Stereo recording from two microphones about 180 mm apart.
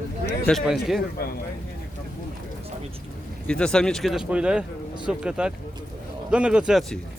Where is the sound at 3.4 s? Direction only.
5° left (ahead or behind).